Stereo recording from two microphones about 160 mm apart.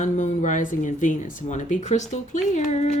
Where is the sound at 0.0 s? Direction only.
50° left (ahead or behind).